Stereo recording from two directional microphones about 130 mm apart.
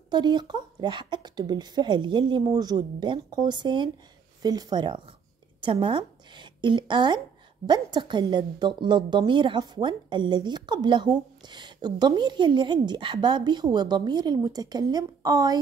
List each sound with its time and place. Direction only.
0.1 s a woman's voice: 35° right (ahead or behind)